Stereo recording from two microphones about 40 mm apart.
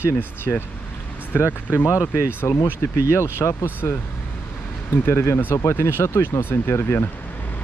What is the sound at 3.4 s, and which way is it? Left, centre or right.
Speech, left.